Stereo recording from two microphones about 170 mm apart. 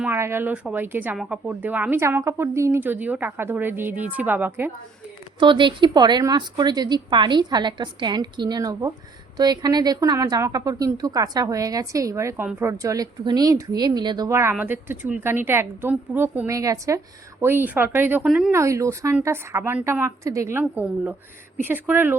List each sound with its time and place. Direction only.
0.0 s speech: 15° right (ahead or behind)
5.4 s a woman's voice: 30° right (ahead or behind); by 18.5 s 5° right (ahead or behind)
18.5 s speech: 15° right (ahead or behind)